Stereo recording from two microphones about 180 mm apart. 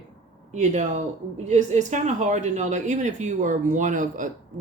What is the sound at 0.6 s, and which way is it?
Speech, 40° right (ahead or behind).